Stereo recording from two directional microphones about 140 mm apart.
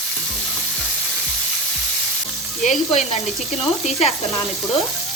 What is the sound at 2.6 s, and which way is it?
Sizzle, 50° left (ahead or behind).